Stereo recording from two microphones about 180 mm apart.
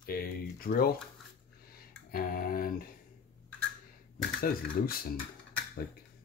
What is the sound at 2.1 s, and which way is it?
Speech, 55° left (ahead or behind).